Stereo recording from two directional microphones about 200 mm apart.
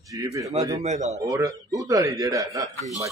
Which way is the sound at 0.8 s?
35° right (ahead or behind).